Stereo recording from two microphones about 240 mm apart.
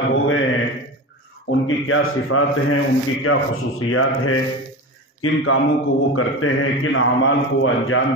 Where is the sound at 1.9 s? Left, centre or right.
Left.